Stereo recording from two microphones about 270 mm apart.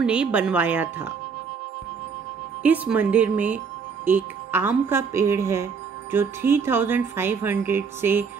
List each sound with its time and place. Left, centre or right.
0.0 s speech: centre
2.6 s speech: centre